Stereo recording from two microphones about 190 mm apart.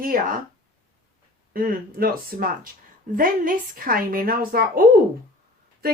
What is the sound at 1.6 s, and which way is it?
A woman's voice, 50° right (ahead or behind).